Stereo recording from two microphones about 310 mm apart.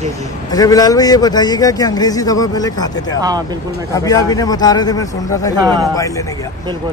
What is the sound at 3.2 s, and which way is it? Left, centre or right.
Speech, centre.